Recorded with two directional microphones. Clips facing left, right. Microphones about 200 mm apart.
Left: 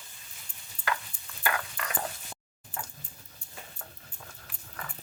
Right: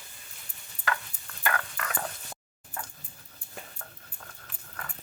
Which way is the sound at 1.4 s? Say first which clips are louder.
Right 1 dB; 10° left (ahead or behind).